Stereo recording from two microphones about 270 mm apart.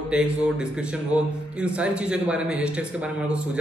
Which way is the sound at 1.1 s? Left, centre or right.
Centre.